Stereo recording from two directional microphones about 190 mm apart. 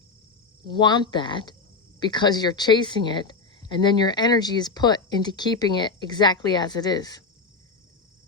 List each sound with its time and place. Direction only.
0.6 s speech: 25° left (ahead or behind)